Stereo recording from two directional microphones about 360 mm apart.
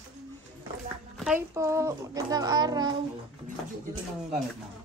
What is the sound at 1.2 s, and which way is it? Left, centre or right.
A child's voice, centre.